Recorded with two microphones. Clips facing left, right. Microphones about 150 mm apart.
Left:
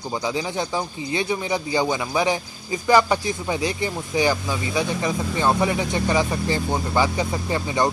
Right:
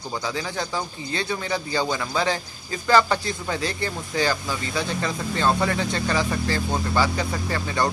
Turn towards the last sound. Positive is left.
turn(degrees=20)  # may be behind; listen again after turning